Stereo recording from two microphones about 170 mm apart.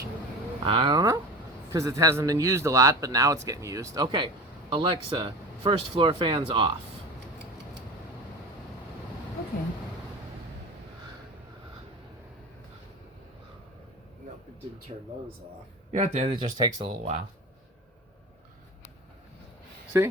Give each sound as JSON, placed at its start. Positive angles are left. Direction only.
{"t": 0.6, "sound": "a man's voice", "side_deg": -30}
{"t": 14.9, "sound": "speech", "side_deg": -40}
{"t": 16.3, "sound": "a man's voice", "side_deg": -25}
{"t": 19.9, "sound": "speech", "side_deg": -20}